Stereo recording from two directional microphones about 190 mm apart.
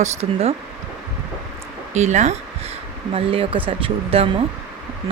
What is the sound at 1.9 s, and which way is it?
Speech, 40° right (ahead or behind).